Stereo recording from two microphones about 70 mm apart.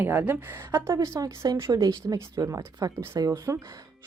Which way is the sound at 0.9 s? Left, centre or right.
Right.